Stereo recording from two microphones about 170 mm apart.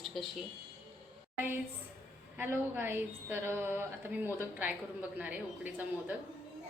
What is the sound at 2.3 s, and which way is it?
A woman's voice, 10° right (ahead or behind).